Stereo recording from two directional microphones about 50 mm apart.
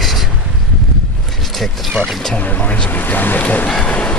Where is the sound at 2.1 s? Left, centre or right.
Centre.